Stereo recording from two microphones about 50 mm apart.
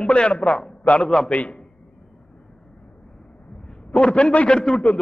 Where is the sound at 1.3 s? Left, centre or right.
Left.